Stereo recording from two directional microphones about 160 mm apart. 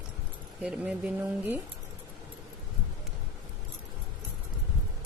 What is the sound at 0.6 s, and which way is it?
Speech, 5° right (ahead or behind).